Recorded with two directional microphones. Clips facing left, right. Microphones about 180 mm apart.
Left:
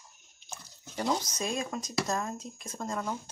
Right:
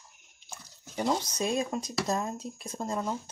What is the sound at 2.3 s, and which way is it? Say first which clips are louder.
Speech: right 4 dB; 35° right (ahead or behind).